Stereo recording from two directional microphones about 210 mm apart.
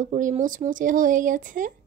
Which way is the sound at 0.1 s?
35° right (ahead or behind).